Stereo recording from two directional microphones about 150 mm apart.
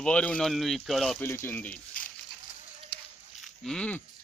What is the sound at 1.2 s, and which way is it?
Speech, 15° left (ahead or behind).